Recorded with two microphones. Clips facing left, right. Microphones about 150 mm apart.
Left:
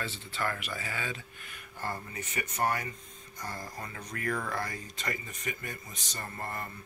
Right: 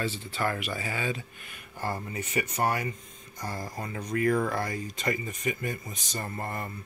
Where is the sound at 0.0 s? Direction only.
20° right (ahead or behind).